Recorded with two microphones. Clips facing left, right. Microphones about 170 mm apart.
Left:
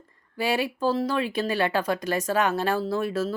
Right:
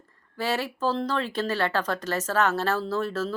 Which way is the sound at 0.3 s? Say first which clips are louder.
Left 2 dB; 15° left (ahead or behind).